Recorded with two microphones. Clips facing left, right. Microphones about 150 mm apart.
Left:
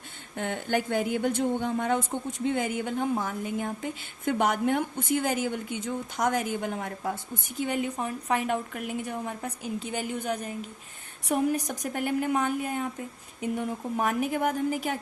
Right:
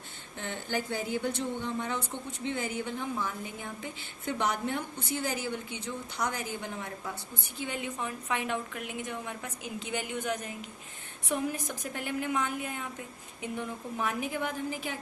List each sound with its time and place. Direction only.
0.3 s a woman's voice: 55° left (ahead or behind)